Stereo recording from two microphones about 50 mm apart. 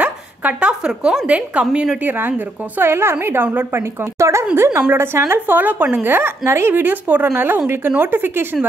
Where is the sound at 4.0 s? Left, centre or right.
Right.